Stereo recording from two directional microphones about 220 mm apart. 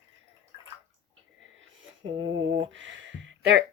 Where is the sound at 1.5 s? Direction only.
60° right (ahead or behind).